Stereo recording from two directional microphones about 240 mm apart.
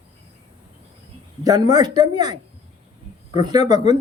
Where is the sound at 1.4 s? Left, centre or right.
Centre.